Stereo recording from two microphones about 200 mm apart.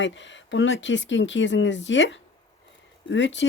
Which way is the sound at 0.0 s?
65° left (ahead or behind).